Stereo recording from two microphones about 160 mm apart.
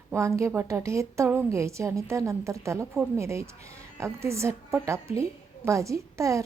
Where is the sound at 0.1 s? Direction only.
20° right (ahead or behind).